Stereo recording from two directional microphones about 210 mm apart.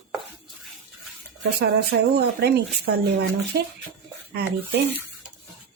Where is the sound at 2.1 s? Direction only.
50° right (ahead or behind).